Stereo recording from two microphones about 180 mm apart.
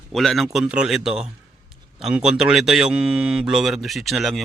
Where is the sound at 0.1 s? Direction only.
Centre (ahead or behind).